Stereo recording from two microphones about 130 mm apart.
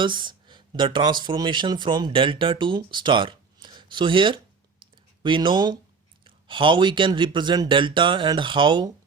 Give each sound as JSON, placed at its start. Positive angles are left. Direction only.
{"t": 0.0, "sound": "speech", "side_deg": -35}